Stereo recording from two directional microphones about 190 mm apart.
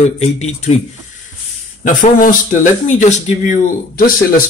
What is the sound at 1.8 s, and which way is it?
Speech, 45° left (ahead or behind).